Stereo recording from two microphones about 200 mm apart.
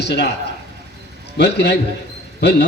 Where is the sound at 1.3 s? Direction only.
55° left (ahead or behind).